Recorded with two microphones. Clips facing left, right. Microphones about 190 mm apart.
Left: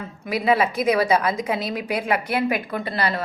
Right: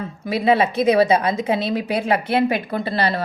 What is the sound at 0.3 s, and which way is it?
A woman's voice, 25° right (ahead or behind).